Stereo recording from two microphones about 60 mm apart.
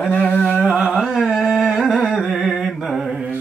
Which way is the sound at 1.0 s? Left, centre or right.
Centre.